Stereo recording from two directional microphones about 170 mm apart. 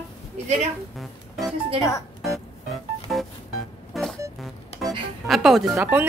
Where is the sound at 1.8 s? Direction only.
20° left (ahead or behind).